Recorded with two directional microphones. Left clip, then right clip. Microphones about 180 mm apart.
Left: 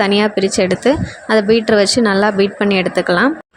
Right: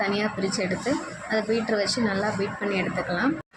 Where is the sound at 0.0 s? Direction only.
55° left (ahead or behind).